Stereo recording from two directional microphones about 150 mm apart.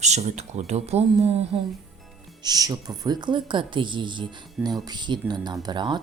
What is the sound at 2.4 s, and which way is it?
Speech, 25° right (ahead or behind).